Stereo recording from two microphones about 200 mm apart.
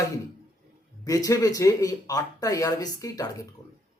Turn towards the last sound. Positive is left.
turn(degrees=15)  # may be behind; listen again after turning